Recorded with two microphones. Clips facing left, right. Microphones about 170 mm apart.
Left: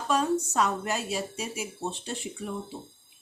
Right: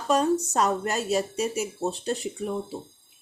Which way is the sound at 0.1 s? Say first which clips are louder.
Right 4 dB; 40° right (ahead or behind).